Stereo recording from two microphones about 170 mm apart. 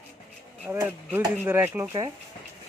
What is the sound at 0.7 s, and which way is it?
Speech, 10° right (ahead or behind).